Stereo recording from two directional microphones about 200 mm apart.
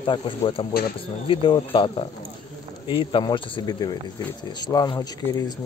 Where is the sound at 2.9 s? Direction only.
25° left (ahead or behind).